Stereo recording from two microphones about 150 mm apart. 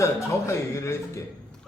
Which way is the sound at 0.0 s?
20° left (ahead or behind).